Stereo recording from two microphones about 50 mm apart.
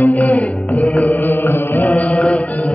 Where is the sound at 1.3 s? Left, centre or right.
Left.